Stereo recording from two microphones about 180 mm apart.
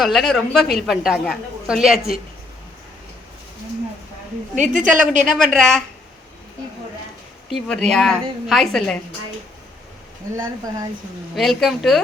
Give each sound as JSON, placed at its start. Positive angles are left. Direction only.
{"t": 0.0, "sound": "speech", "side_deg": 0}
{"t": 4.5, "sound": "a woman's voice", "side_deg": -45}
{"t": 5.2, "sound": "speech", "side_deg": -5}
{"t": 7.5, "sound": "speech", "side_deg": 0}
{"t": 10.3, "sound": "speech", "side_deg": -15}
{"t": 11.3, "sound": "speech", "side_deg": 0}